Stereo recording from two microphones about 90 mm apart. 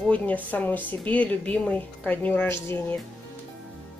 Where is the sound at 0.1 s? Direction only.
15° left (ahead or behind).